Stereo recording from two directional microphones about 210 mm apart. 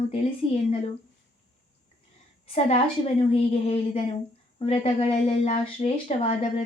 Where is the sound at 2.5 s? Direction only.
30° left (ahead or behind).